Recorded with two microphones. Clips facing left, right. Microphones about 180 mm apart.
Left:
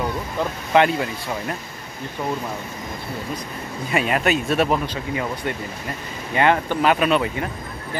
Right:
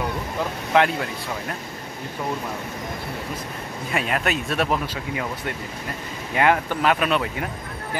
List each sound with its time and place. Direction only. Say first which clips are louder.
0.7 s speech: left 2 dB; centre (ahead or behind)
3.9 s speech: left 4 dB; centre (ahead or behind)